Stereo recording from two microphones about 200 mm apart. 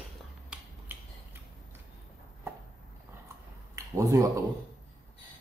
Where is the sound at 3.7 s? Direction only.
15° right (ahead or behind).